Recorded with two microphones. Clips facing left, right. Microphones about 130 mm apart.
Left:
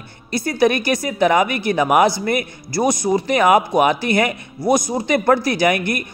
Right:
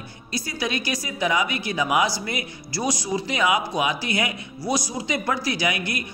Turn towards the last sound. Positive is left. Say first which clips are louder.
# left 8 dB
turn(degrees=55)  # may be behind; listen again after turning